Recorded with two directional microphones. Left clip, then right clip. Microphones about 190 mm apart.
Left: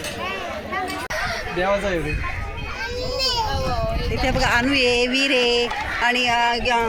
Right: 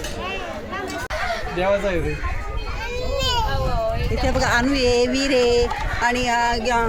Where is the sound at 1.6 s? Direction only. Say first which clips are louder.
Right 1 dB; 20° right (ahead or behind).